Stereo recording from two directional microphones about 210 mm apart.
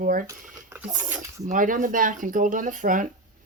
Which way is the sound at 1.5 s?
40° right (ahead or behind).